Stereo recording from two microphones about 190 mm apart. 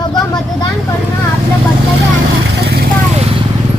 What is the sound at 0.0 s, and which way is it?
Vehicle, 20° left (ahead or behind).